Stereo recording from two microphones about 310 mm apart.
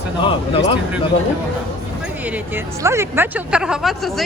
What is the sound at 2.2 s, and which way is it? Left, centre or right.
Speech, centre.